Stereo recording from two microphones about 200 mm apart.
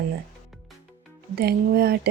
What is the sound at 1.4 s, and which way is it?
Speech, 50° right (ahead or behind).